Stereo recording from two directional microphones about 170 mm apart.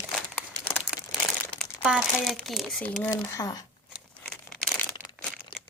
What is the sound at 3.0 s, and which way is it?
Speech, 15° left (ahead or behind).